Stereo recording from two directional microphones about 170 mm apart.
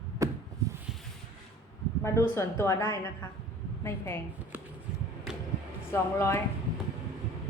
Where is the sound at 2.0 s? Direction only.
15° left (ahead or behind).